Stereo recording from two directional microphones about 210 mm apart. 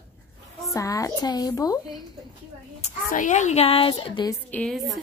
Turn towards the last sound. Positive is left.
turn(degrees=5)  # may be behind; listen again after turning